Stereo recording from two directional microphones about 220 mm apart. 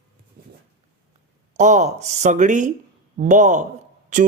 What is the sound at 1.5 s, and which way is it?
Speech, 35° right (ahead or behind).